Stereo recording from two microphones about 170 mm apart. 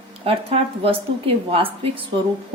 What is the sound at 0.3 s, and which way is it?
A woman's voice, 35° right (ahead or behind).